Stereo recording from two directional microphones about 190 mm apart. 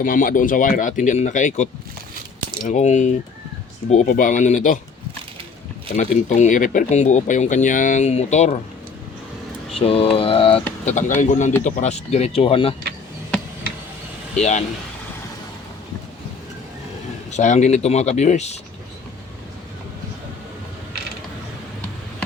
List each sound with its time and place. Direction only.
0.0 s speech: 45° left (ahead or behind)
6.0 s speech: 40° left (ahead or behind)
9.7 s mantra: 30° left (ahead or behind)
10.8 s speech: 40° left (ahead or behind)
14.3 s speech: 35° left (ahead or behind)
17.3 s speech: 40° left (ahead or behind)